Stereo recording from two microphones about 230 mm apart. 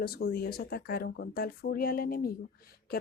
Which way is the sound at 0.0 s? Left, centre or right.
Left.